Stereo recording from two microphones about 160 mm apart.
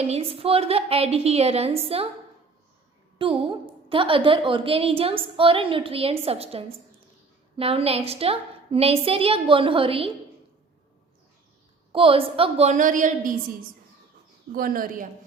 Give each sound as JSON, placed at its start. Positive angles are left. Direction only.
{"t": 0.0, "sound": "a woman's voice", "side_deg": -40}
{"t": 3.2, "sound": "a woman's voice", "side_deg": -35}
{"t": 11.9, "sound": "a woman's voice", "side_deg": -35}
{"t": 14.5, "sound": "speech", "side_deg": -65}